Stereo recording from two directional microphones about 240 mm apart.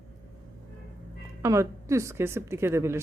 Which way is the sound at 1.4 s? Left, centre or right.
Centre.